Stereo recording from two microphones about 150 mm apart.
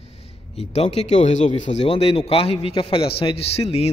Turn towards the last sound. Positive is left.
turn(degrees=45)  # may be behind; listen again after turning